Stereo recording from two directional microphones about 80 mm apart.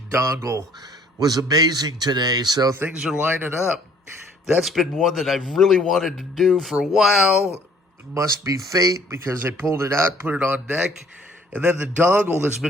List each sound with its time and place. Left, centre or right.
0.1 s a man's voice: right
1.2 s a man's voice: right
2.9 s speech: centre
3.2 s a man's voice: right
4.6 s speech: centre
8.1 s speech: right
9.1 s a man's voice: right